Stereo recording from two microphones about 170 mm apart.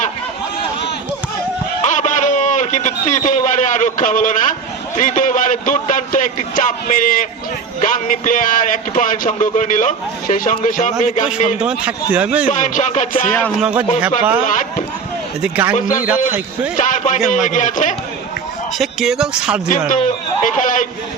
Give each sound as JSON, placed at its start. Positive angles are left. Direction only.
{"t": 1.8, "sound": "a sound", "side_deg": 45}
{"t": 4.9, "sound": "a man's voice", "side_deg": 50}
{"t": 11.6, "sound": "speech", "side_deg": -10}
{"t": 12.5, "sound": "a man's voice", "side_deg": 45}
{"t": 13.6, "sound": "speech", "side_deg": -10}
{"t": 14.4, "sound": "speech", "side_deg": 50}
{"t": 15.4, "sound": "speech", "side_deg": -10}
{"t": 15.7, "sound": "a man's voice", "side_deg": 50}
{"t": 16.0, "sound": "speech", "side_deg": -10}
{"t": 16.7, "sound": "a man's voice", "side_deg": 45}
{"t": 18.8, "sound": "speech", "side_deg": 0}
{"t": 19.9, "sound": "a man's voice", "side_deg": 50}